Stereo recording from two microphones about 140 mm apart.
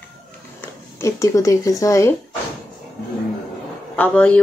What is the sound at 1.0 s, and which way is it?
A woman's voice, 25° left (ahead or behind).